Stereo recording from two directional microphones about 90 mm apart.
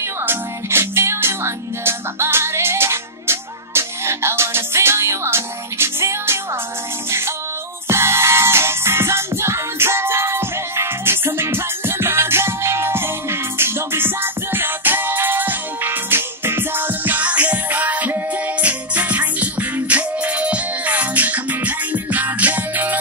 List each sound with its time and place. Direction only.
0.2 s music: 25° right (ahead or behind)